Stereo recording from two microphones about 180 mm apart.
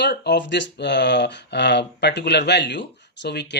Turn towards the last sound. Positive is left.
turn(degrees=70)  # may be behind; listen again after turning